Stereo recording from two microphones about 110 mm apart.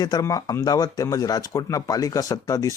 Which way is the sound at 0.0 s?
35° left (ahead or behind).